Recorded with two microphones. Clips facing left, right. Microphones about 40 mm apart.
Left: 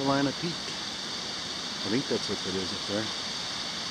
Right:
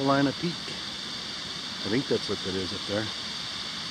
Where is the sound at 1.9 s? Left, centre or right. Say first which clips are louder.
Right 2 dB; centre.